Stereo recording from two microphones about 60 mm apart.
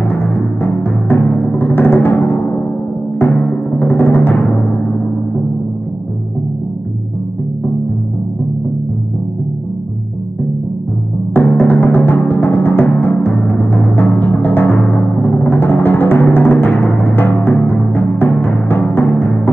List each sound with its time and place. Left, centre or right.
0.0 s timpani: left
11.3 s music: left